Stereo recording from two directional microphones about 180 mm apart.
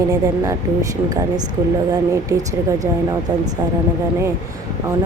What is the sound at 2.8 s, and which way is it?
Speech, 20° right (ahead or behind).